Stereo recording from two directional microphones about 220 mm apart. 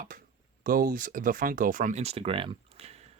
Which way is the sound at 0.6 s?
40° right (ahead or behind).